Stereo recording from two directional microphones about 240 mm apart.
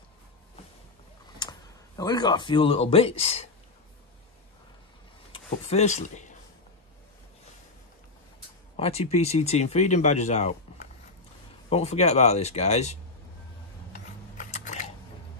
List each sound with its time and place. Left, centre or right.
1.4 s tick-tock: centre
2.0 s speech: centre
5.3 s speech: left
8.7 s speech: left
11.7 s speech: left
13.9 s mechanisms: left